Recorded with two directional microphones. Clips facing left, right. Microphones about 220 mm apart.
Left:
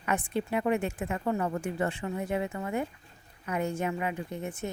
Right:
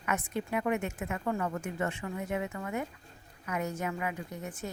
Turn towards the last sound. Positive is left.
turn(degrees=25)  # may be behind; listen again after turning